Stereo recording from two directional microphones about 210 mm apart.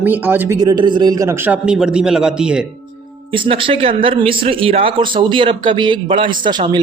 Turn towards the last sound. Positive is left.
turn(degrees=-25)  # may be behind; listen again after turning